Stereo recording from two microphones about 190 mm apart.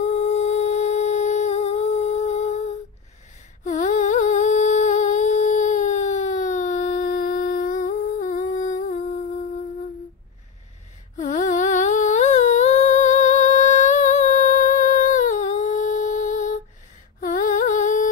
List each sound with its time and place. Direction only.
0.0 s humming: 35° left (ahead or behind)
11.1 s humming: 40° left (ahead or behind)
17.2 s a sound: 40° left (ahead or behind)